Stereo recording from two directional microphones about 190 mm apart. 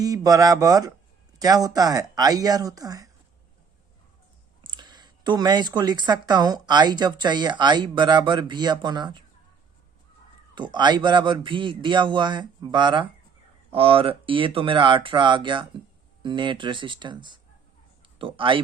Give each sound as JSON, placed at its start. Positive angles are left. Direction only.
{"t": 0.0, "sound": "a man's voice", "side_deg": -20}
{"t": 4.6, "sound": "a woman's voice", "side_deg": -25}
{"t": 10.5, "sound": "a man's voice", "side_deg": -25}